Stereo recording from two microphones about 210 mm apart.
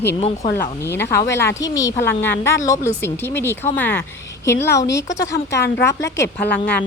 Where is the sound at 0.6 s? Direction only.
10° left (ahead or behind).